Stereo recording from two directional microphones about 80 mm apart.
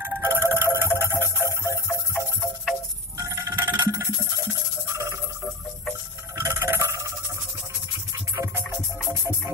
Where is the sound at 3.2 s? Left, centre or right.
Right.